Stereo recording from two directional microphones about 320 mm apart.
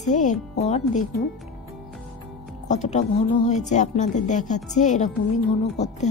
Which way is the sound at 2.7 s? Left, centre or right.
Left.